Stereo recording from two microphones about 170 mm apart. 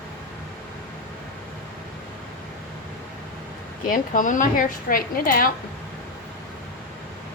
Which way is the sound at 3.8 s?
50° left (ahead or behind).